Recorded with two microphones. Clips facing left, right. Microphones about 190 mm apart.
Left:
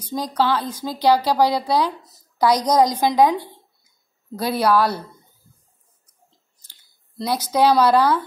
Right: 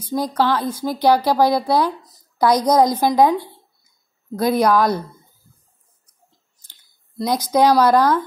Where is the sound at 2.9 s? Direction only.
10° right (ahead or behind).